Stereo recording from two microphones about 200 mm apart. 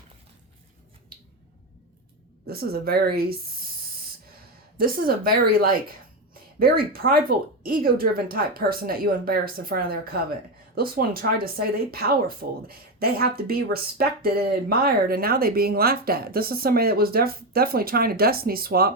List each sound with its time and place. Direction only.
2.5 s speech: 50° right (ahead or behind)
4.8 s speech: 45° right (ahead or behind)